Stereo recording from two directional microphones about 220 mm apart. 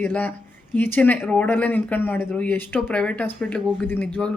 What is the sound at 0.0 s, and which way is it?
A man's voice, 10° left (ahead or behind).